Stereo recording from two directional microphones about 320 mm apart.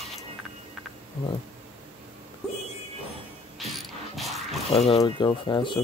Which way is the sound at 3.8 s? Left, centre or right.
Centre.